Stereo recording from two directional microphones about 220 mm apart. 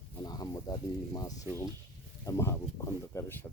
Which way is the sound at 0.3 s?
20° left (ahead or behind).